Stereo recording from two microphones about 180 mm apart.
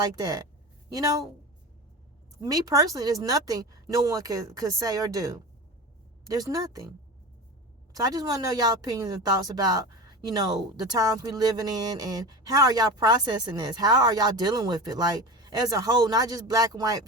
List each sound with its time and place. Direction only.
0.0 s speech: 20° right (ahead or behind)
2.4 s speech: 20° right (ahead or behind)
7.9 s speech: 20° right (ahead or behind)